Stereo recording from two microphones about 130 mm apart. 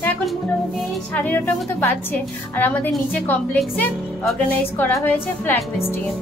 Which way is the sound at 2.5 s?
15° left (ahead or behind).